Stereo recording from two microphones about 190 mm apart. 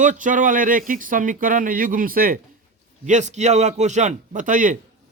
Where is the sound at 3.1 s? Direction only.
40° right (ahead or behind).